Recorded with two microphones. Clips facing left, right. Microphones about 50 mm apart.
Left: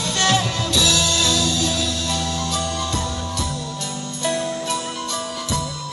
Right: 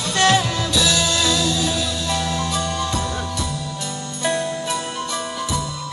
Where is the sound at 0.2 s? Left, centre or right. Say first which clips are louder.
Right 3 dB; right.